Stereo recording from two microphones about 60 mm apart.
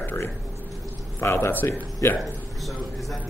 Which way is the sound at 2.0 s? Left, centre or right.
Left.